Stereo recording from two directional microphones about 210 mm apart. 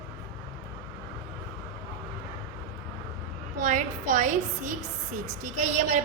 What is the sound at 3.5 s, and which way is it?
A woman's voice, 35° right (ahead or behind).